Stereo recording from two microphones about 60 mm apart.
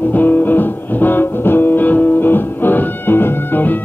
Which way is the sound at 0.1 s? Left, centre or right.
Left.